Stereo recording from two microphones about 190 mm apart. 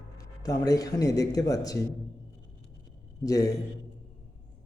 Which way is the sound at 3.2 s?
20° left (ahead or behind).